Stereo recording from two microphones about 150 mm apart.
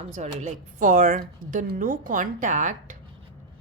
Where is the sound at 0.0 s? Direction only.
50° right (ahead or behind).